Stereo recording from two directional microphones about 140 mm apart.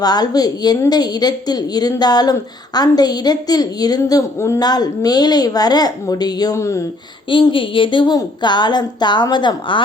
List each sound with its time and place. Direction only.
0.0 s a woman's voice: 30° left (ahead or behind)
7.3 s a woman's voice: 35° left (ahead or behind)